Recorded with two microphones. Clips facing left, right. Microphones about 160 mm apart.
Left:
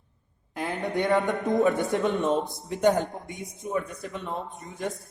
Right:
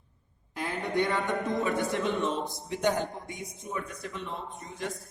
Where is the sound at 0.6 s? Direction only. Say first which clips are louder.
Left 3 dB; 40° left (ahead or behind).